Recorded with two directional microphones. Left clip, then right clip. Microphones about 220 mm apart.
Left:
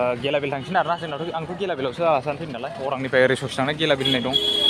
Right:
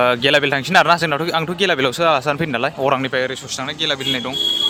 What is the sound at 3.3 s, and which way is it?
Speech, 20° left (ahead or behind).